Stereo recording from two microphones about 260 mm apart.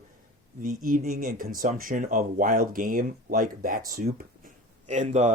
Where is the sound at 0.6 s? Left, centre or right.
Right.